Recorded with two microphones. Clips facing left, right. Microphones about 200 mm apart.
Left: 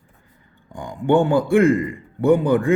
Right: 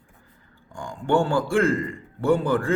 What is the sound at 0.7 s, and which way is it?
A man's voice, 20° left (ahead or behind).